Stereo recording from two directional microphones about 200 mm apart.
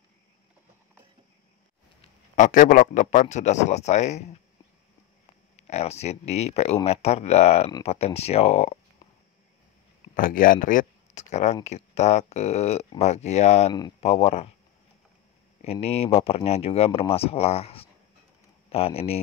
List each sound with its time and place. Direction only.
2.0 s a man's voice: 40° left (ahead or behind)
5.6 s a man's voice: 35° left (ahead or behind)
10.1 s a man's voice: 45° left (ahead or behind)
15.6 s speech: 30° left (ahead or behind)